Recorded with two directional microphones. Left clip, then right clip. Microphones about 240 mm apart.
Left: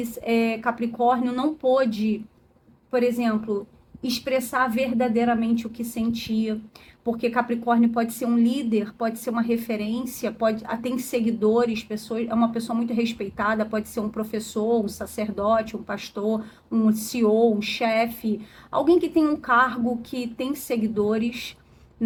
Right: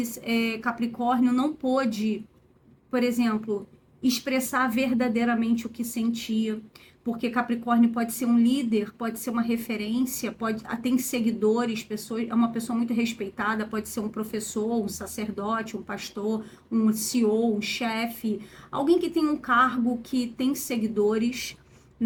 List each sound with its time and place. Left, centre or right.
0.3 s speech: left